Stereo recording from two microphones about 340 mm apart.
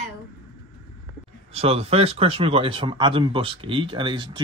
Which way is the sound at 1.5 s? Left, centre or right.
Centre.